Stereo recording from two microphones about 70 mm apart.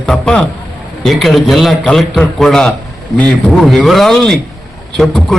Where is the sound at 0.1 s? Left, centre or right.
Centre.